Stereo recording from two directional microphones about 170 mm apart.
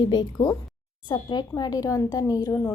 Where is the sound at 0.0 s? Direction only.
25° left (ahead or behind).